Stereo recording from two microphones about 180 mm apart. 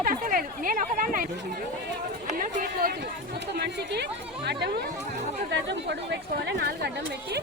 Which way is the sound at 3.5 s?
65° right (ahead or behind).